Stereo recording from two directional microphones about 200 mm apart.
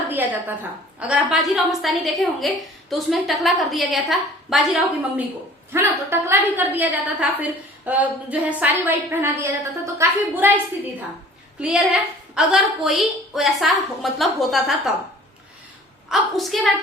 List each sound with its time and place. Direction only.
0.1 s a sound: 10° right (ahead or behind)
0.9 s a woman's voice: 5° right (ahead or behind)
11.6 s a woman's voice: 5° right (ahead or behind)
16.0 s a woman's voice: centre (ahead or behind)